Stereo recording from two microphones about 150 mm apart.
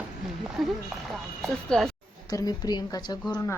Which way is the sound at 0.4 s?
5° right (ahead or behind).